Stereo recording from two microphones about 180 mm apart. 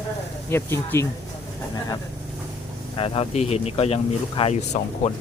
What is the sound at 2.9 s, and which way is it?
Speech, 30° left (ahead or behind).